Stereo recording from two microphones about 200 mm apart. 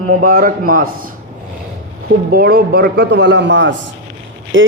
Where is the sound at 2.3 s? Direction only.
50° right (ahead or behind).